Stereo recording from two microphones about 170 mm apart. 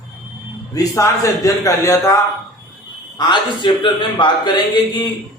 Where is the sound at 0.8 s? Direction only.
15° left (ahead or behind).